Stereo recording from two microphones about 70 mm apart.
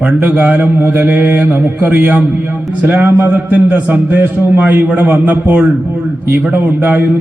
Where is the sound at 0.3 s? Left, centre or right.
Right.